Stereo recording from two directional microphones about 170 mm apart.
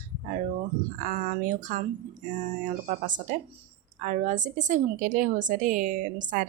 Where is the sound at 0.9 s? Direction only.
50° right (ahead or behind).